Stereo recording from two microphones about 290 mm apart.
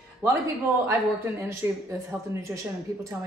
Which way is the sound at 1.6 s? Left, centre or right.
Centre.